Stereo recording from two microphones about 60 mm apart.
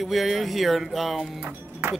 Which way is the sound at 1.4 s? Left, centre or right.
Right.